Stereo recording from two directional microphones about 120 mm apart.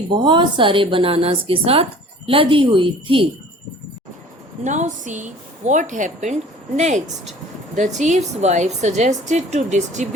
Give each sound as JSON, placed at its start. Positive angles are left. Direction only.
{"t": 0.1, "sound": "a woman's voice", "side_deg": -40}
{"t": 4.6, "sound": "a woman's voice", "side_deg": -90}